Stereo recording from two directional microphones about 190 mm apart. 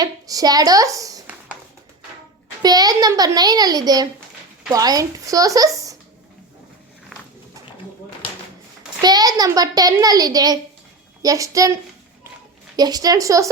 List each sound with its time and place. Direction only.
0.0 s a woman's voice: 20° right (ahead or behind)
2.6 s a child's voice: 20° right (ahead or behind)
9.0 s a child's voice: 20° right (ahead or behind)